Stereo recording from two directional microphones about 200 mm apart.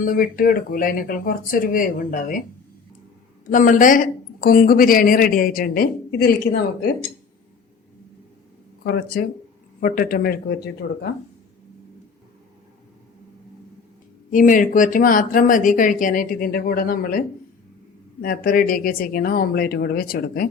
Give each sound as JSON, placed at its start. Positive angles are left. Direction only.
{"t": 0.0, "sound": "a woman's voice", "side_deg": 45}
{"t": 3.5, "sound": "a woman's voice", "side_deg": 40}
{"t": 8.8, "sound": "a woman's voice", "side_deg": 50}
{"t": 14.3, "sound": "a woman's voice", "side_deg": 40}